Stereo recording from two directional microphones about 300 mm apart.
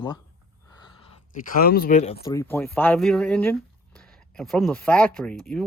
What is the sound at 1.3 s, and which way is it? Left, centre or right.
Speech, left.